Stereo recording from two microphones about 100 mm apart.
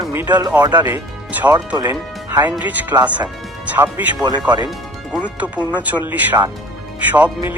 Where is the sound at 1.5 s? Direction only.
45° right (ahead or behind).